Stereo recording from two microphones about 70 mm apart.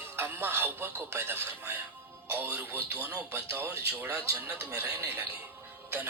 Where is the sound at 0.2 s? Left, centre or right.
Right.